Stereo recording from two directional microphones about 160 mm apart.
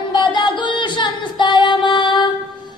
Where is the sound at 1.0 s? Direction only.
30° left (ahead or behind).